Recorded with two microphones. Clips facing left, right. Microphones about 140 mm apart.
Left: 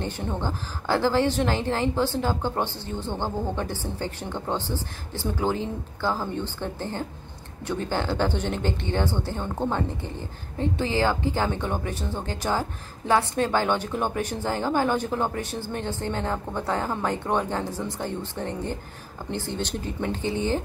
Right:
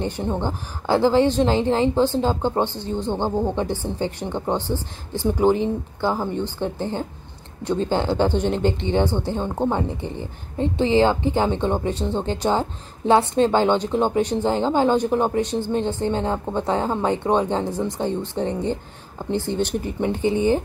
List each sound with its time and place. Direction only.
0.0 s a woman's voice: 15° right (ahead or behind)